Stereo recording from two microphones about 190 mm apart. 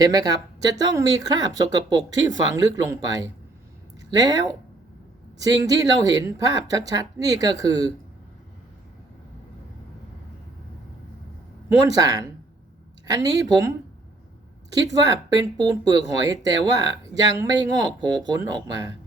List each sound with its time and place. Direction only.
0.0 s speech: 20° right (ahead or behind)
11.8 s speech: 20° right (ahead or behind)
14.9 s speech: 20° right (ahead or behind)